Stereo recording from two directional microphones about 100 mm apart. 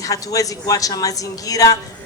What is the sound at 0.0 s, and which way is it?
Speech, 35° left (ahead or behind).